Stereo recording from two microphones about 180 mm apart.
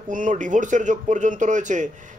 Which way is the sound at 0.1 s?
45° right (ahead or behind).